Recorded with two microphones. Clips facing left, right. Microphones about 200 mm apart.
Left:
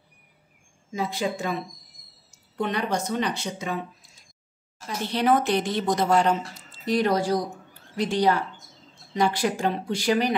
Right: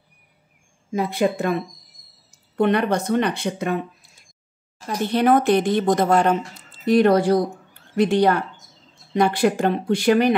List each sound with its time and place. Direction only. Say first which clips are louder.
0.9 s speech: right 7 dB; 60° right (ahead or behind)